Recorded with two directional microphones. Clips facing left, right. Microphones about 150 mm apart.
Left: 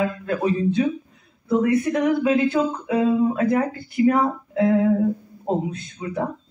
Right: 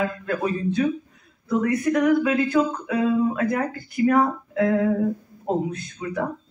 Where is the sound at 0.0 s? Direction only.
25° left (ahead or behind).